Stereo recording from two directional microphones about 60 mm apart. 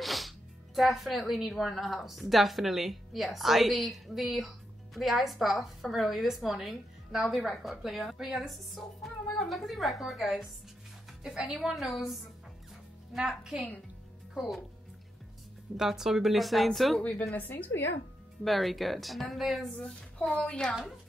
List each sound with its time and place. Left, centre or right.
0.0 s music: centre
0.7 s a woman's voice: centre
15.8 s a woman's voice: centre
17.1 s a woman's voice: centre
17.4 s a woman's voice: left
18.4 s a woman's voice: centre
20.2 s a woman's voice: centre